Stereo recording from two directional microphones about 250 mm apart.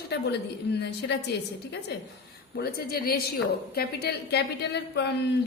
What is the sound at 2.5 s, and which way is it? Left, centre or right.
A woman's voice, left.